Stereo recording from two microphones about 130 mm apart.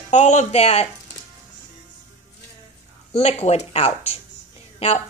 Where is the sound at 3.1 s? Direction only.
50° left (ahead or behind).